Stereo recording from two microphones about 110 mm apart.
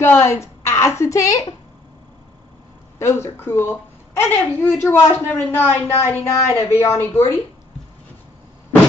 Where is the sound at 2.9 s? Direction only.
25° left (ahead or behind).